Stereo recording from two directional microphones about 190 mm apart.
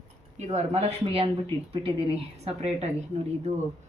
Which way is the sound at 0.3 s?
35° right (ahead or behind).